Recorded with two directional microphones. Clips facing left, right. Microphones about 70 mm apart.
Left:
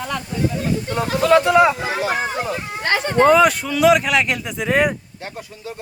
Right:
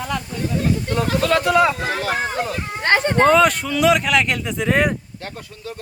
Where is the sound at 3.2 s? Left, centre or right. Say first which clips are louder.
Left 2 dB; centre.